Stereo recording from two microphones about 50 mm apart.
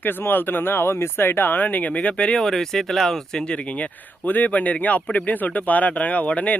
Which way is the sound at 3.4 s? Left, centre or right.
Left.